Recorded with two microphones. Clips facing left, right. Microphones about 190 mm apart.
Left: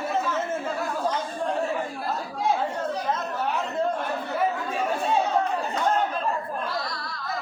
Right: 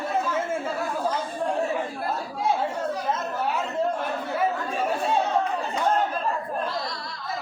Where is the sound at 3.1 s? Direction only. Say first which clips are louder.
Even; 5° right (ahead or behind).